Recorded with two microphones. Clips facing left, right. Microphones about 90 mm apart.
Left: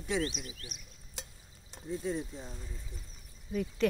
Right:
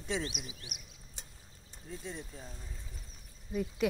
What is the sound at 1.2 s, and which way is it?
Stir, 90° left.